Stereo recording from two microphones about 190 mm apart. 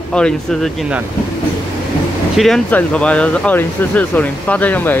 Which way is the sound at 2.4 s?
Centre (ahead or behind).